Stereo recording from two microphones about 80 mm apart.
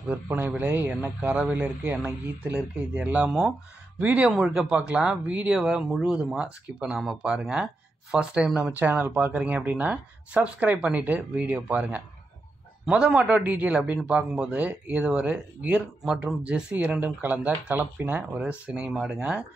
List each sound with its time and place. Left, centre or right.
0.1 s speech: right
1.0 s speech: centre
3.3 s speech: centre
8.7 s speech: right
13.9 s speech: centre